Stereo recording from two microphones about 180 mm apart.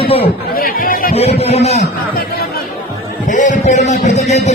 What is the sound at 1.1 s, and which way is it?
Speech, 35° left (ahead or behind).